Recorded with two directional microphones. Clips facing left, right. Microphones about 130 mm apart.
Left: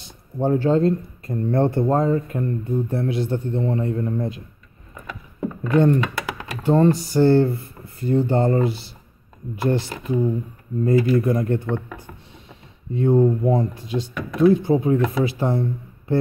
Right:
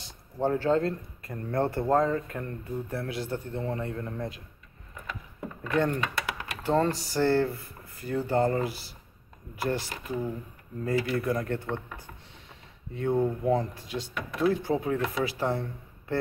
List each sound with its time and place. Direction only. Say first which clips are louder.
0.0 s speech: left 5 dB; 20° left (ahead or behind)
5.8 s speech: left 9 dB; 25° left (ahead or behind)
12.9 s speech: left 9 dB; 25° left (ahead or behind)